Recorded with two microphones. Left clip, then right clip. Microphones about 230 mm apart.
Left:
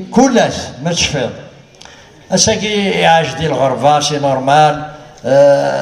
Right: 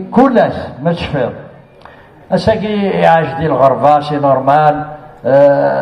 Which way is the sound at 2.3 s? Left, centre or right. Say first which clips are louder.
Even; left.